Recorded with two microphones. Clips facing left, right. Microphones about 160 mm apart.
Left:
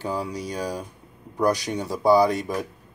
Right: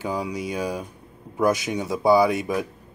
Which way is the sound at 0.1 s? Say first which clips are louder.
Right 2 dB; centre (ahead or behind).